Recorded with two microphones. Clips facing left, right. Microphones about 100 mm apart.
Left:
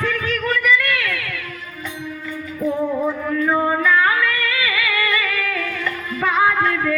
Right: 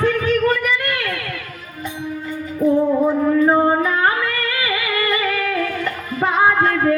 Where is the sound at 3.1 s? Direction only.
30° right (ahead or behind).